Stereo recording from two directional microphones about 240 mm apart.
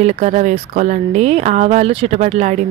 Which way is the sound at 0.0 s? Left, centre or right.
Right.